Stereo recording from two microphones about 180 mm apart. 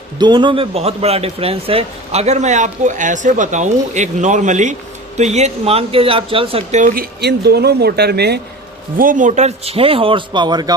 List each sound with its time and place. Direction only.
0.2 s a man's voice: 25° right (ahead or behind); by 8.4 s 65° right (ahead or behind)
9.0 s a man's voice: 50° right (ahead or behind); by 10.8 s 25° right (ahead or behind)